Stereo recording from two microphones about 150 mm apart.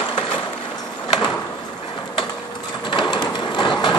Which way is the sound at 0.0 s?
30° left (ahead or behind).